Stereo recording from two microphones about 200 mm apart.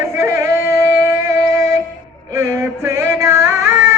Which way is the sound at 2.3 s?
15° right (ahead or behind).